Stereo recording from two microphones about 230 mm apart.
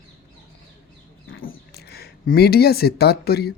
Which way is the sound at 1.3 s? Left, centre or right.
Left.